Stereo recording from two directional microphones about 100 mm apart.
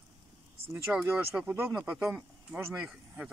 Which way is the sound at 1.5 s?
25° right (ahead or behind).